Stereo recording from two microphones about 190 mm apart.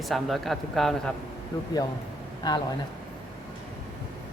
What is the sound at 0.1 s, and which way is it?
A man's voice, centre (ahead or behind).